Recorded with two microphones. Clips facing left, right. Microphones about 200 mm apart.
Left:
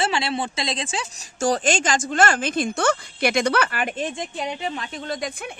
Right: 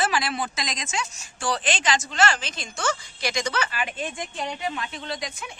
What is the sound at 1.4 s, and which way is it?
Speech, 45° left (ahead or behind).